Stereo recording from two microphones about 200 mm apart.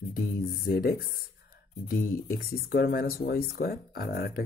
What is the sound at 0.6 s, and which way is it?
Speech, 50° left (ahead or behind).